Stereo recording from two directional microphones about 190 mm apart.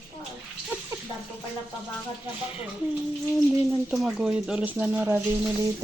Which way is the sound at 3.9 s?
5° right (ahead or behind).